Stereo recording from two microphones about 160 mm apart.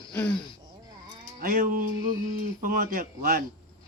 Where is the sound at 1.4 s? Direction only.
60° right (ahead or behind).